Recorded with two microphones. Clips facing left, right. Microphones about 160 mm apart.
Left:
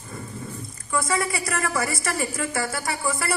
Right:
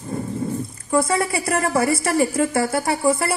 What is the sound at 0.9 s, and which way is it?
A woman's voice, 55° right (ahead or behind).